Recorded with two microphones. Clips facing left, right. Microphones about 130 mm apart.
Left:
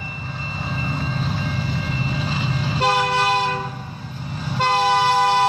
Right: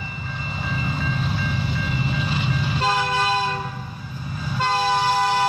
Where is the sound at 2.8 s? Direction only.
70° left (ahead or behind).